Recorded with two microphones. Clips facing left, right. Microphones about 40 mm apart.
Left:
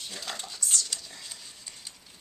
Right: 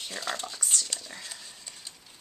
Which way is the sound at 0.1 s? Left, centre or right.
Centre.